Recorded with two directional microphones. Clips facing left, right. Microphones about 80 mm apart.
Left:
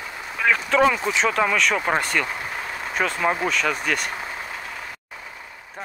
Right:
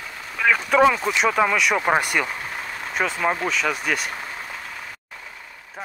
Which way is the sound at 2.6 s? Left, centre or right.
Centre.